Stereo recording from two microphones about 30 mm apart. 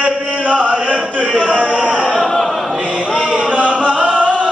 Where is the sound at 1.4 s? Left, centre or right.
Right.